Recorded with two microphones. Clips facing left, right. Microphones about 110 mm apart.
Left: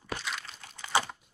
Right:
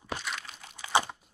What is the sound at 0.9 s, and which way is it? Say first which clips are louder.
Crumpling: right 2 dB; 20° right (ahead or behind).